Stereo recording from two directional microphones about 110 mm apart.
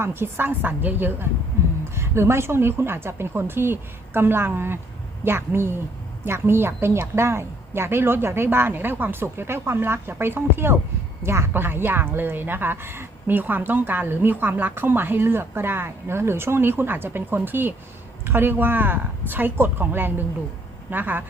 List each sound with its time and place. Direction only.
0.0 s a woman's voice: 20° right (ahead or behind)